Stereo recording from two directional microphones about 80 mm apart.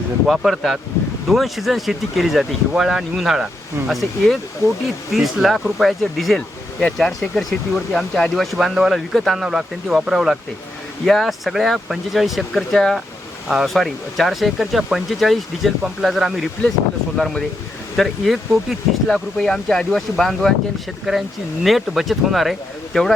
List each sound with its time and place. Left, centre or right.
0.3 s speech: centre
4.6 s speech: left
5.1 s speech: centre